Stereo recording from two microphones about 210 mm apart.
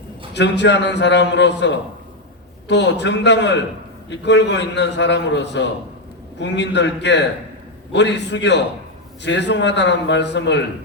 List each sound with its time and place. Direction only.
0.3 s a man's voice: 55° left (ahead or behind)